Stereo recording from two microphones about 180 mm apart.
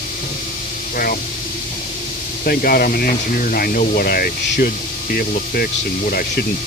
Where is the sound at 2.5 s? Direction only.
55° left (ahead or behind).